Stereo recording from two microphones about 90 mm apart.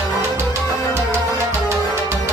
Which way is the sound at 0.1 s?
35° right (ahead or behind).